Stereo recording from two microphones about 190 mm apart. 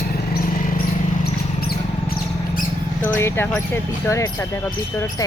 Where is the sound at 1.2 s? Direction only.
55° left (ahead or behind).